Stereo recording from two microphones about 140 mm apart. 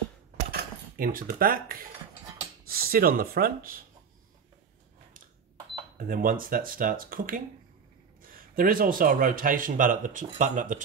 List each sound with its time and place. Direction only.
0.5 s speech: 90° right
5.9 s speech: 85° right; by 10.8 s 65° right (ahead or behind)